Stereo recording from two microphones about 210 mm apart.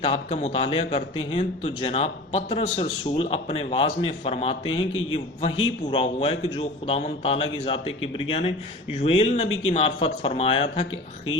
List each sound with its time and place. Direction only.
0.0 s a man's voice: 30° left (ahead or behind)
4.7 s a man's voice: 70° left (ahead or behind)
5.1 s a man's voice: 25° left (ahead or behind)